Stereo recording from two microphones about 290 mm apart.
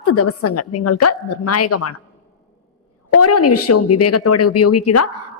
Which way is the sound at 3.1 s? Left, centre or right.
Left.